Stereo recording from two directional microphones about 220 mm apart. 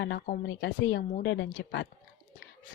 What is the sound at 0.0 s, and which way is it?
A woman's voice, 50° left (ahead or behind).